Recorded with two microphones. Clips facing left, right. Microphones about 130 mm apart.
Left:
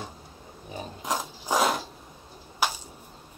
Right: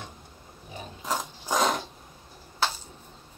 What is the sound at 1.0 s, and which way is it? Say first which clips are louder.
Mechanisms: even; 10° left (ahead or behind).